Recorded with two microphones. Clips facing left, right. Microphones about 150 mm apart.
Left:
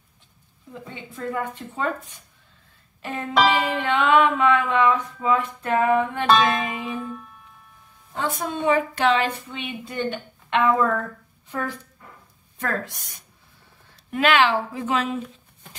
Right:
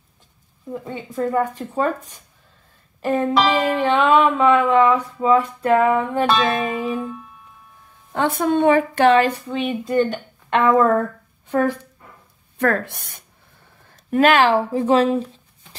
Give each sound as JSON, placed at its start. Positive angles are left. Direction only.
{"t": 0.7, "sound": "music", "side_deg": -45}
{"t": 8.1, "sound": "a woman's voice", "side_deg": -60}
{"t": 12.5, "sound": "speech", "side_deg": -60}
{"t": 13.9, "sound": "music", "side_deg": -45}